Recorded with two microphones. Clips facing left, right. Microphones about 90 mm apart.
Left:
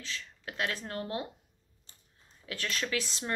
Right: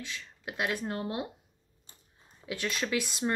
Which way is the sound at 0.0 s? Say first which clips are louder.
Right 1 dB; 15° right (ahead or behind).